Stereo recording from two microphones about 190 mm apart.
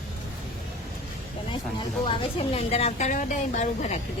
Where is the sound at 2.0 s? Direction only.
30° left (ahead or behind).